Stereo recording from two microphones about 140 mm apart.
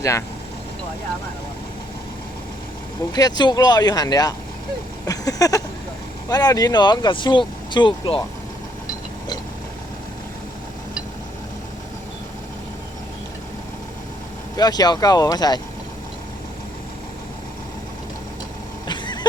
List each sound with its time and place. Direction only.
0.0 s speech: 20° left (ahead or behind)
3.2 s speech: 30° left (ahead or behind)
14.5 s speech: 30° left (ahead or behind)
18.9 s a sound: 30° left (ahead or behind)